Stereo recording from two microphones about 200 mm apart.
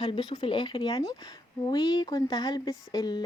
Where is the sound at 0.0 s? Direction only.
20° left (ahead or behind).